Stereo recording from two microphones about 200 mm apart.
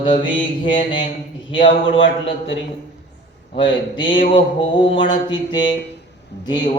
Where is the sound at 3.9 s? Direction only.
25° left (ahead or behind).